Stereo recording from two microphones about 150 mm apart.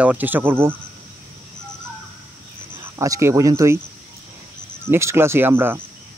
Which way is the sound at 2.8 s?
20° right (ahead or behind).